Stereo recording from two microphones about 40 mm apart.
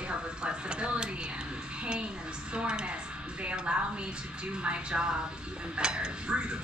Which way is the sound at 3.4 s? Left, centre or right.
Right.